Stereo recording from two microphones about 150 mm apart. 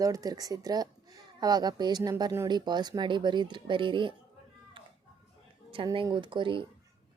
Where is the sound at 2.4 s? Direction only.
30° right (ahead or behind).